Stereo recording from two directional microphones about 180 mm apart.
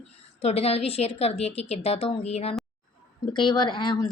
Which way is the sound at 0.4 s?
35° left (ahead or behind).